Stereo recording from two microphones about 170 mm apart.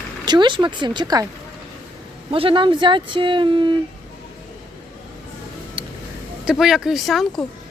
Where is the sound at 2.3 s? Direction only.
30° right (ahead or behind).